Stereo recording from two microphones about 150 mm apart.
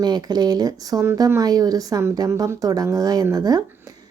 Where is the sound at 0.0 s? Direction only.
30° right (ahead or behind).